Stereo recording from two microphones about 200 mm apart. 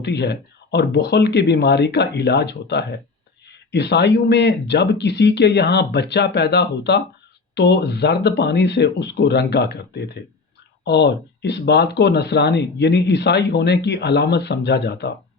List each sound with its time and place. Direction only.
0.0 s speech: 60° left (ahead or behind)